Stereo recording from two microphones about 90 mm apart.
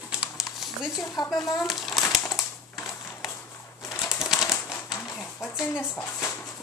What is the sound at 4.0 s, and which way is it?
Typewriter, 5° right (ahead or behind).